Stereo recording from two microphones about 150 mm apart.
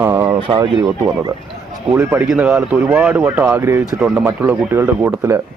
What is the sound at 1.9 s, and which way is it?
Speech, 15° right (ahead or behind).